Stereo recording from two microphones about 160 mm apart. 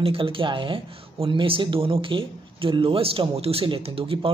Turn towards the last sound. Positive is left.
turn(degrees=-35)  # may be behind; listen again after turning